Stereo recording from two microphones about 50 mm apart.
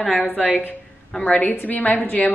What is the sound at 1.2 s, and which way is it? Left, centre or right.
A woman's voice, left.